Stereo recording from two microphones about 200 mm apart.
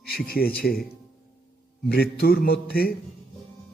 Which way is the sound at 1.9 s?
50° left (ahead or behind).